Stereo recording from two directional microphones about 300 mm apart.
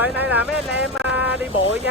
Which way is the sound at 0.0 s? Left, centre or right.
Centre.